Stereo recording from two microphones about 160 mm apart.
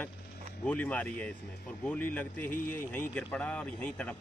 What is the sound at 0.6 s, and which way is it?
Speech, 10° left (ahead or behind).